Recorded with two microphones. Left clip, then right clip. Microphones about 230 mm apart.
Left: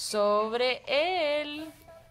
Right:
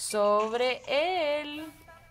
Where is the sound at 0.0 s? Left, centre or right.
Centre.